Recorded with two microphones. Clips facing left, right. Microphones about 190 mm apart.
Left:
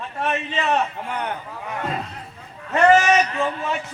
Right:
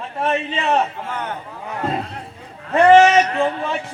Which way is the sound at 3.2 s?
55° right (ahead or behind).